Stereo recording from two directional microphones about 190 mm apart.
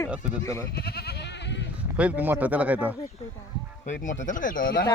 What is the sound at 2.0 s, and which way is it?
Speech, 10° right (ahead or behind).